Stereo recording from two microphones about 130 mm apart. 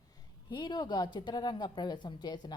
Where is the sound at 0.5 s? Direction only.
35° left (ahead or behind).